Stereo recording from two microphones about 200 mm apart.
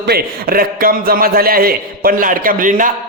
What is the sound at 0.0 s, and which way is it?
A man's voice, 50° right (ahead or behind).